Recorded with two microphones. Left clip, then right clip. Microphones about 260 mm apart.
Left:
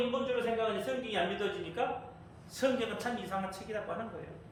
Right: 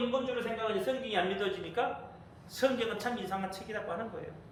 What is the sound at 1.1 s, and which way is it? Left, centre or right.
A man's voice, centre.